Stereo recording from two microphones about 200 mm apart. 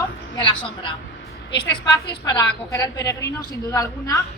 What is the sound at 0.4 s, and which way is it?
A woman's voice, 25° left (ahead or behind).